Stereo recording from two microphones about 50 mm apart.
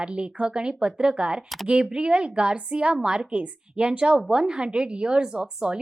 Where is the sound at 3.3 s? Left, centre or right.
Right.